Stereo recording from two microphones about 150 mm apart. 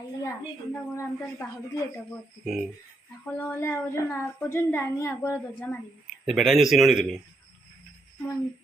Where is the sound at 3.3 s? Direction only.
15° left (ahead or behind).